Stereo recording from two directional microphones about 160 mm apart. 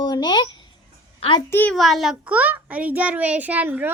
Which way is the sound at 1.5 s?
10° left (ahead or behind).